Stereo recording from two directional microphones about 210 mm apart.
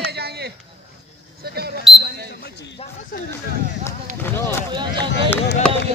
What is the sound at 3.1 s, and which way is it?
Speech, 45° left (ahead or behind).